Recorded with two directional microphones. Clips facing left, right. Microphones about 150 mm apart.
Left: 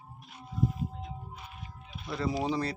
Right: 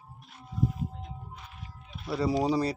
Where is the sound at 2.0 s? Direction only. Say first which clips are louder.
Right 4 dB; 5° right (ahead or behind).